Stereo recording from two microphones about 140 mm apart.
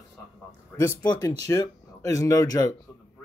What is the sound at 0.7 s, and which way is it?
Speech, 20° left (ahead or behind).